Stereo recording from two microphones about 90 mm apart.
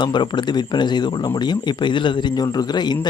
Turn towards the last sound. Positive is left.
turn(degrees=55)  # may be behind; listen again after turning